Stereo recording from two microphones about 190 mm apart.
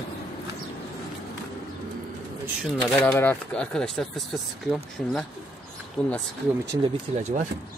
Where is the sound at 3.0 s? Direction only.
10° left (ahead or behind).